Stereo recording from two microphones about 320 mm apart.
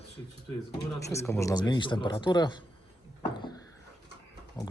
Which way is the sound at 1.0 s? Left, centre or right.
Centre.